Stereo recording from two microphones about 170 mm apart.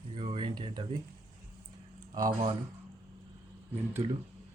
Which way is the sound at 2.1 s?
20° right (ahead or behind).